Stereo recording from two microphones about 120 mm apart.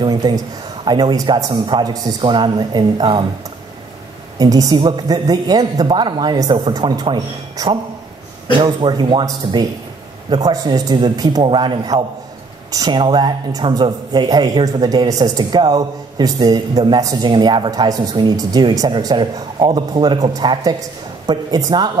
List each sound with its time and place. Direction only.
0.0 s a man's voice: 35° right (ahead or behind)
4.4 s a man's voice: 30° right (ahead or behind)